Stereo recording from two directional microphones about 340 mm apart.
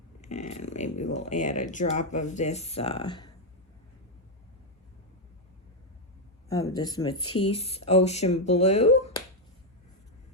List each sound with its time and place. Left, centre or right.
0.2 s speech: left
6.5 s speech: centre